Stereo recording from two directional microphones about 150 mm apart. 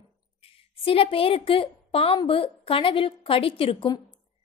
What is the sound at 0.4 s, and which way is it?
A woman's voice, 40° left (ahead or behind).